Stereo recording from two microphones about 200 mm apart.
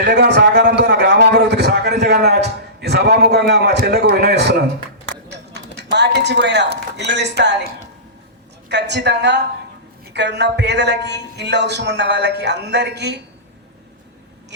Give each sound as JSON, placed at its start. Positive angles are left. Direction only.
{"t": 0.0, "sound": "a man's voice", "side_deg": -60}
{"t": 5.5, "sound": "a man's voice", "side_deg": -60}
{"t": 8.7, "sound": "a man's voice", "side_deg": -60}